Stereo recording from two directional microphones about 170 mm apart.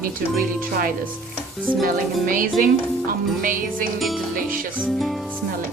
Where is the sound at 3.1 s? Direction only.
55° right (ahead or behind).